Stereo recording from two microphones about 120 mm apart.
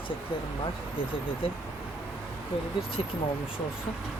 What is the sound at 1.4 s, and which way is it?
Speech, 50° left (ahead or behind).